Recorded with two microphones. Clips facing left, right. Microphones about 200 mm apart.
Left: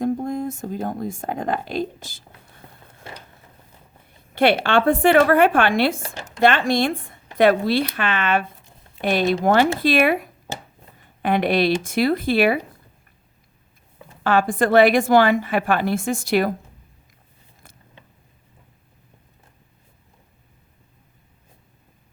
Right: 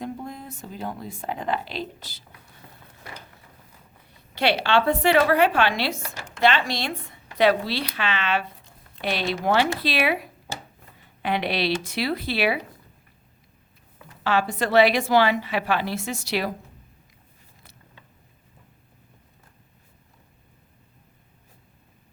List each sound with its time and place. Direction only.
0.0 s speech: 45° left (ahead or behind)
3.1 s a sound: 25° left (ahead or behind)
4.4 s a woman's voice: 50° left (ahead or behind)
14.3 s a woman's voice: 50° left (ahead or behind)